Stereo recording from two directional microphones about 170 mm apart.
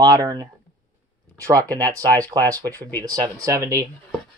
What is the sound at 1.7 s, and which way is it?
Speech, 20° right (ahead or behind).